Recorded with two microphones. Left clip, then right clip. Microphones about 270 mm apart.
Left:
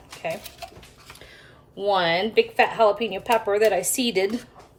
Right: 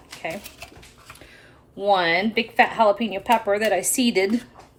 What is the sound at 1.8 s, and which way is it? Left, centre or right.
Speech, centre.